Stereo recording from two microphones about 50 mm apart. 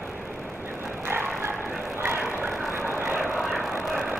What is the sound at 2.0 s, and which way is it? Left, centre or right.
Vehicle, right.